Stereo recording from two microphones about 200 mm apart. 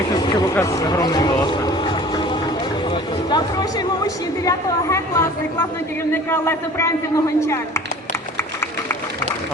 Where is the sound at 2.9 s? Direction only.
20° left (ahead or behind).